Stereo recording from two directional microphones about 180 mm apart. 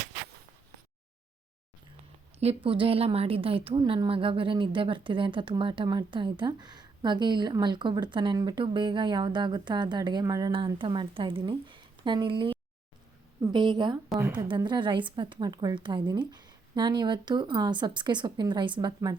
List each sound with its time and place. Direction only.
2.4 s a woman's voice: 30° right (ahead or behind)